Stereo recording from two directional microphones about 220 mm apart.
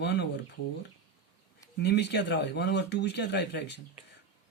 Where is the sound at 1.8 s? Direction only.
50° left (ahead or behind).